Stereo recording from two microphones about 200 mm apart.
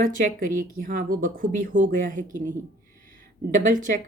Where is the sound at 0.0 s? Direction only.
45° right (ahead or behind).